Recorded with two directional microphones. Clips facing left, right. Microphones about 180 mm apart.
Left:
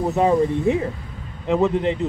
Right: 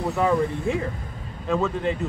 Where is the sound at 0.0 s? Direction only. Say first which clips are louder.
Left 4 dB; 20° left (ahead or behind).